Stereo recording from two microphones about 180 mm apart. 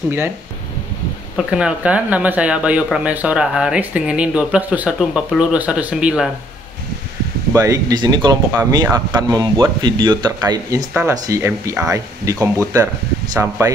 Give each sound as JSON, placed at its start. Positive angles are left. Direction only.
{"t": 1.3, "sound": "speech", "side_deg": -5}
{"t": 7.5, "sound": "speech", "side_deg": -20}
{"t": 10.9, "sound": "speech", "side_deg": -5}